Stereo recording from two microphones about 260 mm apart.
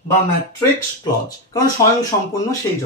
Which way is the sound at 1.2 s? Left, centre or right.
Centre.